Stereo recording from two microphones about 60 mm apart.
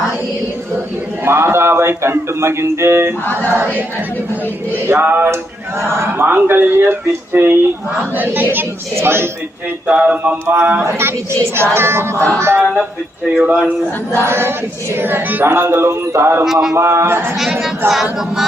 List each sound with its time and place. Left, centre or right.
1.2 s speech: right
6.2 s speech: right
9.8 s speech: right
10.8 s speech: right
13.4 s a sound: centre
14.2 s speech: right
16.4 s a sound: centre
16.7 s speech: right
17.6 s a sound: centre